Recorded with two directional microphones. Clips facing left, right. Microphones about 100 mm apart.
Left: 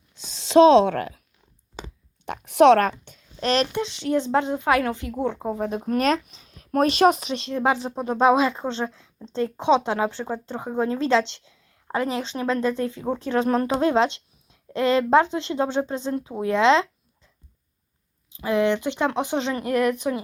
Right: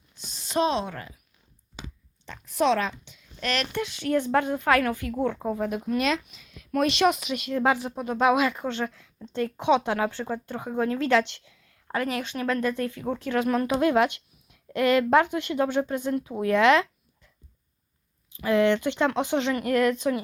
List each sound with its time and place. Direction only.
0.2 s speech: 90° left
2.2 s speech: 65° left (ahead or behind)
3.4 s speech: 25° left (ahead or behind)
5.8 s speech: 40° left (ahead or behind); by 16.9 s 20° left (ahead or behind)
18.3 s speech: 20° left (ahead or behind)